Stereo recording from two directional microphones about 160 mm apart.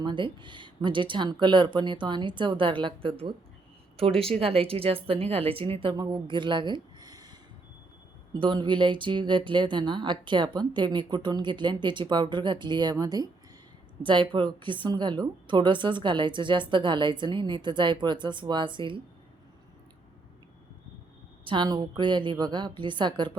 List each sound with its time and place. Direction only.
0.0 s a woman's voice: 30° right (ahead or behind)
21.4 s a woman's voice: 30° right (ahead or behind)